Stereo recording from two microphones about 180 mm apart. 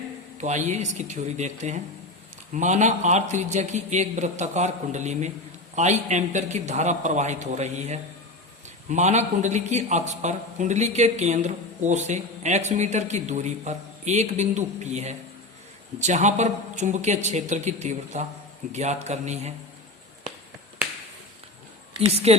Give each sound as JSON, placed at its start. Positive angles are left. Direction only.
{"t": 0.3, "sound": "a man's voice", "side_deg": -40}
{"t": 21.9, "sound": "a man's voice", "side_deg": -35}